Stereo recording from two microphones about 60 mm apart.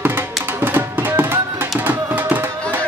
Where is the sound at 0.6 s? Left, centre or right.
Right.